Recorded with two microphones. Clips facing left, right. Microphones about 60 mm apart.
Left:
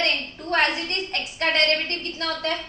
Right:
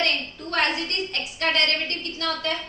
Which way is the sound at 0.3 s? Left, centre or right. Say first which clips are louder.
Left 4 dB; left.